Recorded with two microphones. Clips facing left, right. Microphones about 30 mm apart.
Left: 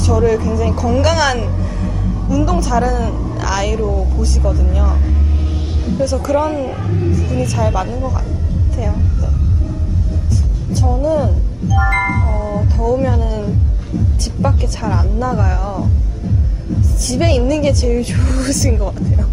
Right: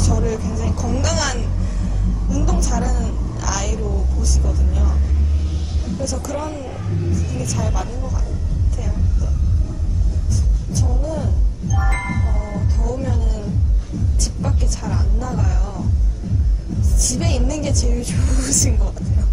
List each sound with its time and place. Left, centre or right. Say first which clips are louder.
0.0 s a woman's voice: left 8 dB; left
10.7 s music: left 9 dB; left
12.8 s a woman's voice: left 12 dB; left
17.1 s a woman's voice: left 9 dB; left
18.2 s speech: left 5 dB; left
18.5 s a woman's voice: left 5 dB; left